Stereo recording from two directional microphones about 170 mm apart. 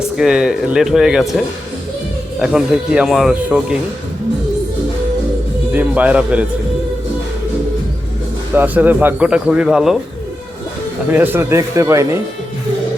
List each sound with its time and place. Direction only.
0.2 s speech: 5° right (ahead or behind)
2.4 s speech: 5° right (ahead or behind)
5.7 s a man's voice: 10° right (ahead or behind)
8.5 s a man's voice: 10° right (ahead or behind)
11.1 s a man's voice: 10° right (ahead or behind)